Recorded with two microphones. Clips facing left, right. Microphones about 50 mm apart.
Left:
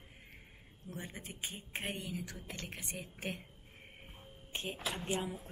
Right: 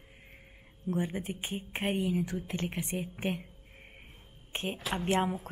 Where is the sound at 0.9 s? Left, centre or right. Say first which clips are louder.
Right 13 dB; right.